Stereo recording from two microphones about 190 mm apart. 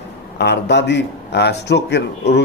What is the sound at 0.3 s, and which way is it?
A man's voice, 60° left (ahead or behind).